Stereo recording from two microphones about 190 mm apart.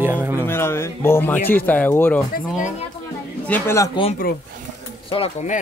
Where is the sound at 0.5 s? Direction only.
15° left (ahead or behind).